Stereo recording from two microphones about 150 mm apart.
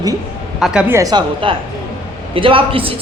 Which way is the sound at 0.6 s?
5° right (ahead or behind).